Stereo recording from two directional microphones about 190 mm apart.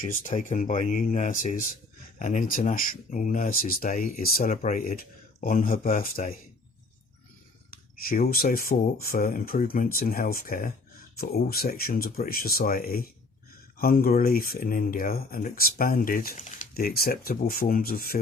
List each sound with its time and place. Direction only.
0.0 s speech: 45° left (ahead or behind)
8.0 s speech: 50° left (ahead or behind)